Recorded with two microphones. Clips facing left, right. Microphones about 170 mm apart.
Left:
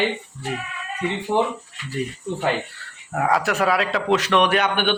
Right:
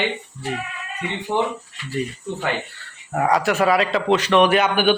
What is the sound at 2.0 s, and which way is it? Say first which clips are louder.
Speech: right 1 dB; centre (ahead or behind).